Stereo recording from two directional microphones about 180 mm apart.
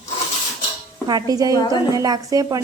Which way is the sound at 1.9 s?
20° right (ahead or behind).